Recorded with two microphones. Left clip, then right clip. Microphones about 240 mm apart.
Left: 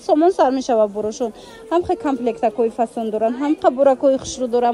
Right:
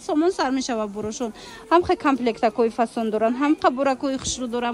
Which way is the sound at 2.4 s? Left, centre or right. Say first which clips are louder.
Left 2 dB; centre.